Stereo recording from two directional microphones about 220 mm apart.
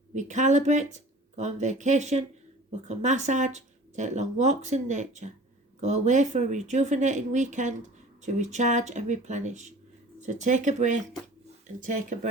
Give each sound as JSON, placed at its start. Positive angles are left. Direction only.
{"t": 0.1, "sound": "speech", "side_deg": -35}